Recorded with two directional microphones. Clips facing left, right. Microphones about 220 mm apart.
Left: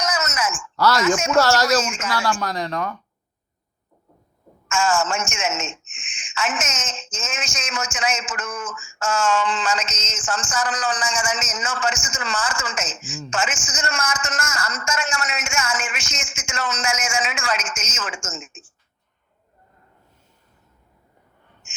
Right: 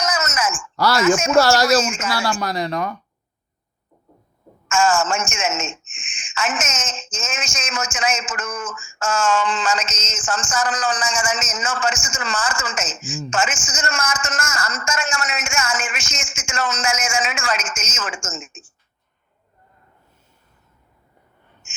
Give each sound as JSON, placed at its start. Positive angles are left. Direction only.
{"t": 0.0, "sound": "groan", "side_deg": -45}
{"t": 0.8, "sound": "a woman's voice", "side_deg": -10}
{"t": 1.0, "sound": "a man's voice", "side_deg": -45}
{"t": 1.4, "sound": "a woman's voice", "side_deg": -10}
{"t": 1.8, "sound": "a man's voice", "side_deg": -45}
{"t": 2.0, "sound": "a woman's voice", "side_deg": -10}
{"t": 4.7, "sound": "a man's voice", "side_deg": -45}
{"t": 21.6, "sound": "a sound", "side_deg": -45}